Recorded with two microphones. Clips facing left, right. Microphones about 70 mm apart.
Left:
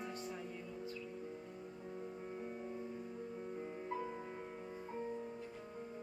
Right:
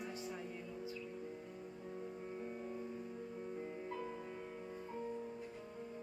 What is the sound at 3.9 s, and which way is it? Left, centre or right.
Music, left.